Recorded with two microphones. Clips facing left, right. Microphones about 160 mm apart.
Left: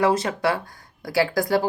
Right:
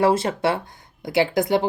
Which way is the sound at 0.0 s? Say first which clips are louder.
Right 2 dB; 30° right (ahead or behind).